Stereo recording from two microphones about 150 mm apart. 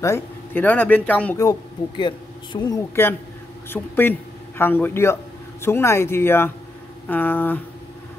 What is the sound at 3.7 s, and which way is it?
A man's voice, 15° left (ahead or behind).